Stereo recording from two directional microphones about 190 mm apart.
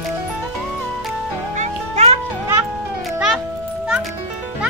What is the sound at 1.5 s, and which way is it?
Music, 35° right (ahead or behind).